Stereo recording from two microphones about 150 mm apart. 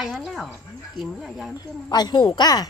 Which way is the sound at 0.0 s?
Centre (ahead or behind).